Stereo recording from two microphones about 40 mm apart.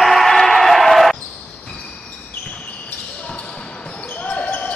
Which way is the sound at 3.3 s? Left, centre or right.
Left.